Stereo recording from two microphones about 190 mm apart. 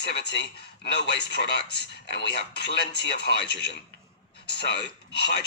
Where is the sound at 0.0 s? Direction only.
60° left (ahead or behind).